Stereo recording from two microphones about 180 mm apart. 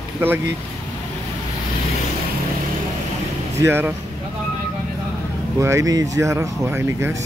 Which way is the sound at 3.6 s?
10° right (ahead or behind).